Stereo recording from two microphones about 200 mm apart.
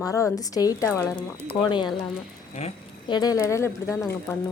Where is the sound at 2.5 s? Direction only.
30° left (ahead or behind).